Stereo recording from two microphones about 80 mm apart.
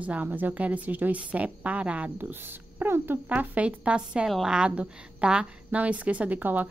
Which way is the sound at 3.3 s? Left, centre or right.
Centre.